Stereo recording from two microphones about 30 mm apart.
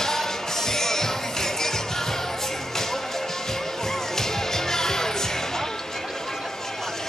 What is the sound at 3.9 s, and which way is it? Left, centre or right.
Music, centre.